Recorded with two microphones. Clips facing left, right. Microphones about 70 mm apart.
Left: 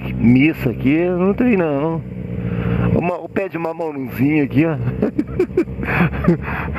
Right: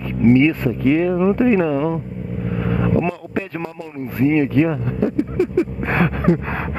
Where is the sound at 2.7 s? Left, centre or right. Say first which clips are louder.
Even; left.